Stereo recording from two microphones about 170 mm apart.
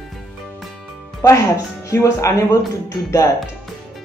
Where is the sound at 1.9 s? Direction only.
20° left (ahead or behind).